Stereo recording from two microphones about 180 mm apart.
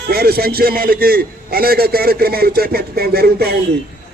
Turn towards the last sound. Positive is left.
turn(degrees=-60)  # may be behind; listen again after turning